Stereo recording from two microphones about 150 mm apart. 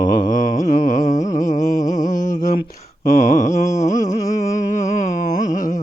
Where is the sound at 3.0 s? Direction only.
55° left (ahead or behind).